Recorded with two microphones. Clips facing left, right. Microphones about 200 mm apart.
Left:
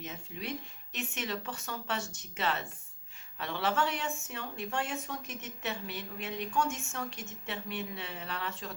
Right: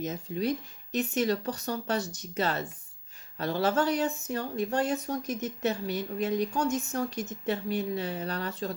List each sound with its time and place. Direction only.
0.0 s speech: 40° right (ahead or behind)